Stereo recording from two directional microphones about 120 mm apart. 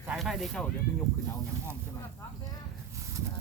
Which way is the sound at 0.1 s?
Centre (ahead or behind).